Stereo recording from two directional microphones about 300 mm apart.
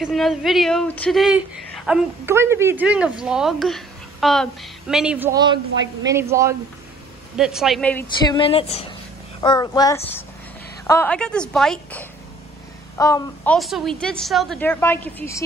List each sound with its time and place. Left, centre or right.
0.0 s speech: centre
8.4 s a child's voice: centre